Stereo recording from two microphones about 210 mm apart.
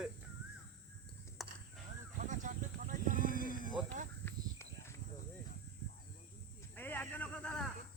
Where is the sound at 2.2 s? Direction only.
35° right (ahead or behind).